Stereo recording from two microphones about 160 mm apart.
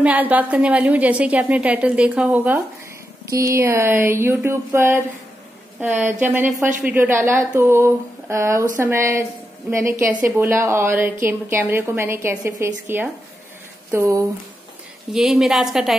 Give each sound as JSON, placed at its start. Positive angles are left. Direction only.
{"t": 0.0, "sound": "a woman's voice", "side_deg": -10}
{"t": 15.1, "sound": "a woman's voice", "side_deg": -5}